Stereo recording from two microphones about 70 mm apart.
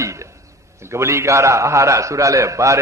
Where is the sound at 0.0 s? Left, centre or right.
Right.